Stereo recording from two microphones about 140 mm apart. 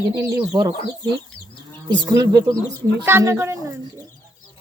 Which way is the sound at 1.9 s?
30° right (ahead or behind).